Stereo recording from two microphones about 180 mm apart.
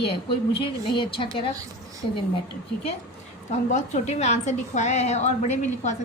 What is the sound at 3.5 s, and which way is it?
A woman's voice, 40° left (ahead or behind).